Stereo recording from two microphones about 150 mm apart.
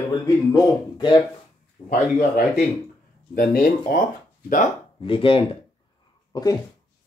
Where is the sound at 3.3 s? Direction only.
70° left (ahead or behind).